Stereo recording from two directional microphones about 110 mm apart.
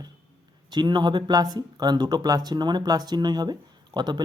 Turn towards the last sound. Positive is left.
turn(degrees=-40)  # may be behind; listen again after turning